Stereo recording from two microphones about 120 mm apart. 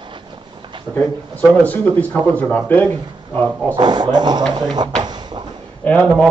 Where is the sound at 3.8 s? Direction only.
35° right (ahead or behind).